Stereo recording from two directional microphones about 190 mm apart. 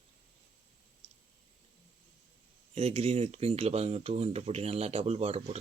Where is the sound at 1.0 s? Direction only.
35° right (ahead or behind).